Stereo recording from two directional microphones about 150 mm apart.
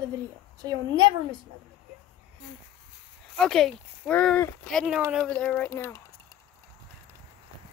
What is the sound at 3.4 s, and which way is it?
Speech, 5° left (ahead or behind).